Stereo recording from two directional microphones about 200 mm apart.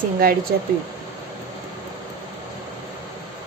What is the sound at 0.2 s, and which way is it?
Speech, 45° right (ahead or behind).